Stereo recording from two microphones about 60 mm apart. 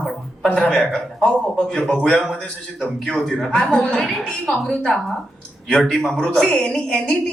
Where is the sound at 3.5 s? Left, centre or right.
Centre.